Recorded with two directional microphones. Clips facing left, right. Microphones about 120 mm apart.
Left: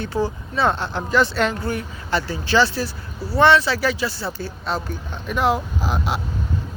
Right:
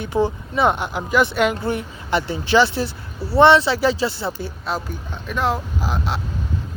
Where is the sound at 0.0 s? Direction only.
20° right (ahead or behind).